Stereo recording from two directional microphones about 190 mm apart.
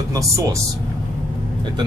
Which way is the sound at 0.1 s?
15° right (ahead or behind).